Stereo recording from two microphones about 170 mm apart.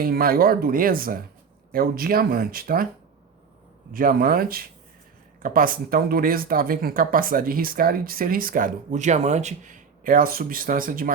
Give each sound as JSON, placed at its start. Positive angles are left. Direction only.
{"t": 0.0, "sound": "speech", "side_deg": -60}
{"t": 3.9, "sound": "speech", "side_deg": -55}